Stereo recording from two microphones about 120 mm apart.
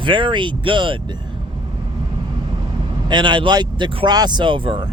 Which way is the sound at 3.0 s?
40° right (ahead or behind).